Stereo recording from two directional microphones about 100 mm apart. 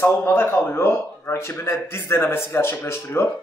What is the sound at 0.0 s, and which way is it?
A man's voice, 25° left (ahead or behind).